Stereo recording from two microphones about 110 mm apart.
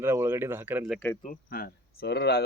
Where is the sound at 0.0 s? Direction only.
25° right (ahead or behind).